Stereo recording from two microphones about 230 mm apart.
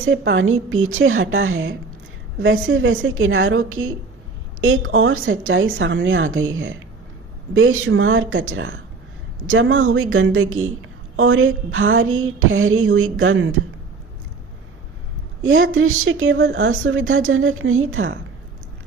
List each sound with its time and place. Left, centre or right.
0.0 s speech: right
15.4 s speech: right